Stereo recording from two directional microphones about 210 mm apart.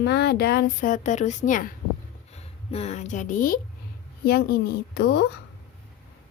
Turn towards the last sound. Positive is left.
turn(degrees=50)  # may be behind; listen again after turning